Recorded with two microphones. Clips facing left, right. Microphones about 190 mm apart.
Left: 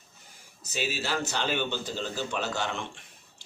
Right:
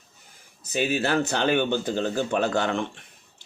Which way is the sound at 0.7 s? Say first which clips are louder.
Right 8 dB; 55° right (ahead or behind).